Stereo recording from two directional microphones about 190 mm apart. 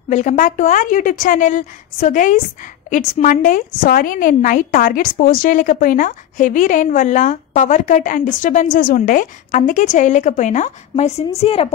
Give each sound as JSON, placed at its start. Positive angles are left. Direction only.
{"t": 0.1, "sound": "a woman's voice", "side_deg": 40}